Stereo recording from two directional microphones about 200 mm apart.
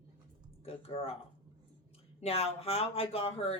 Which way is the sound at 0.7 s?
30° left (ahead or behind).